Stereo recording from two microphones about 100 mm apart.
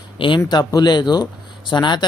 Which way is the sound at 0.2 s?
50° left (ahead or behind).